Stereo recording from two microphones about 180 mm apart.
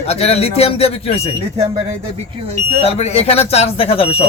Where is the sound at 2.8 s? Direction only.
35° left (ahead or behind).